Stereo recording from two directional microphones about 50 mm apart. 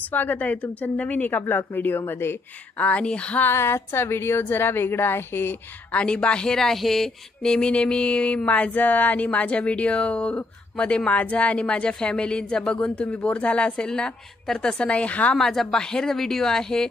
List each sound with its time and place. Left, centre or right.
0.1 s a woman's voice: left
2.8 s speech: left
3.4 s a woman's voice: left
5.9 s speech: left
8.5 s speech: left
15.5 s a woman's voice: centre